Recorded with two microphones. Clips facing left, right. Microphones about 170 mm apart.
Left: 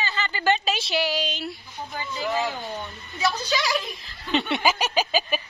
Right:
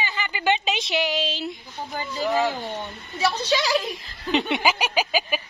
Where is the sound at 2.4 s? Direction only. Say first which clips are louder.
Right 3 dB; 30° right (ahead or behind).